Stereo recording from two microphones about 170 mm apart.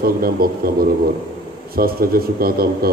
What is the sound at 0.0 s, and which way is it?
A man's voice, 60° right (ahead or behind).